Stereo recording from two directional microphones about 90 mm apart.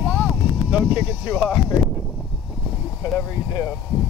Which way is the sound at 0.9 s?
45° left (ahead or behind).